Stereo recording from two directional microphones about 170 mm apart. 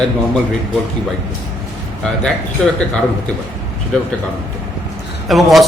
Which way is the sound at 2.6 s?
5° left (ahead or behind).